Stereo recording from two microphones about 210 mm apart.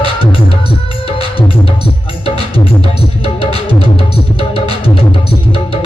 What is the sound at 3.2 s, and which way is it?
Music, 25° left (ahead or behind).